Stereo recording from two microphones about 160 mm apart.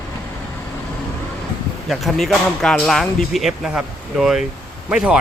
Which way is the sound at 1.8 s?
Centre (ahead or behind).